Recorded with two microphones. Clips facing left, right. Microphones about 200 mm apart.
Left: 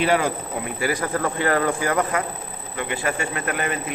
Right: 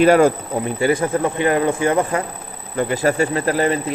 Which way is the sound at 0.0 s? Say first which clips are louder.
Right 9 dB; 45° right (ahead or behind).